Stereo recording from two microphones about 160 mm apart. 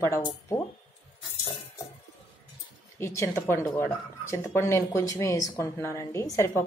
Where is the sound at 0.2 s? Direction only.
25° left (ahead or behind).